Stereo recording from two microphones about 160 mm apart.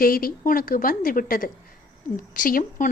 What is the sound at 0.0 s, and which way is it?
A woman's voice, 65° left (ahead or behind).